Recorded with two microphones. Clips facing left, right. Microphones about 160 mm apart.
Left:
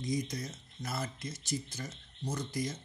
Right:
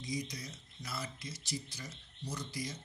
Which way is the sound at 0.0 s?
50° left (ahead or behind).